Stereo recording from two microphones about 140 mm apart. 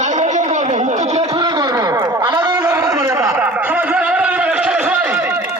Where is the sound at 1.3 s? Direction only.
25° right (ahead or behind).